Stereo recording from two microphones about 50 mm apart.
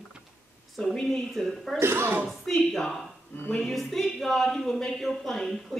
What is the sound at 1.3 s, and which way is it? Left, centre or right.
Speech, centre.